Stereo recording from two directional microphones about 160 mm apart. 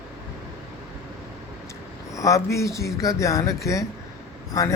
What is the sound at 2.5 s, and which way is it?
A man's voice, 20° left (ahead or behind).